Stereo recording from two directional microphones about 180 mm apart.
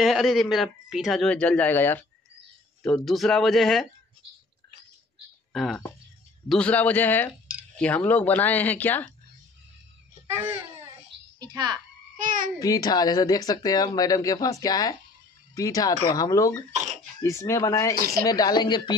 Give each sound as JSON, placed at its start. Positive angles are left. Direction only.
{"t": 0.0, "sound": "speech", "side_deg": 0}
{"t": 5.5, "sound": "speech", "side_deg": 0}
{"t": 10.3, "sound": "a child's voice", "side_deg": -10}
{"t": 12.2, "sound": "a child's voice", "side_deg": -45}
{"t": 12.5, "sound": "speech", "side_deg": 20}
{"t": 17.9, "sound": "speech", "side_deg": -55}
{"t": 18.2, "sound": "speech", "side_deg": 20}